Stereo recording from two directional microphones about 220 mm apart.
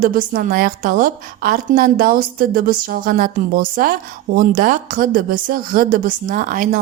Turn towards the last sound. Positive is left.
turn(degrees=-35)  # may be behind; listen again after turning